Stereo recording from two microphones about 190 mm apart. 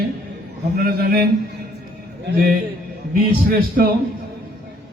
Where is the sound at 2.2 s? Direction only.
50° right (ahead or behind).